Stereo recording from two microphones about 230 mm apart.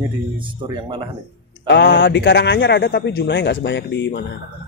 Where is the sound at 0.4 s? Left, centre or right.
Centre.